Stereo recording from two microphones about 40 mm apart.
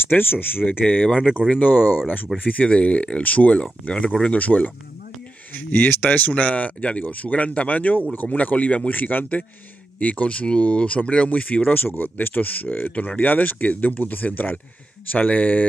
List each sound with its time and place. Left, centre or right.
0.1 s speech: left
1.6 s speech: left
6.1 s speech: left
12.0 s speech: left
12.6 s speech: left